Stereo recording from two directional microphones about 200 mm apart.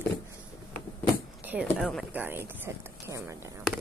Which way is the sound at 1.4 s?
10° right (ahead or behind).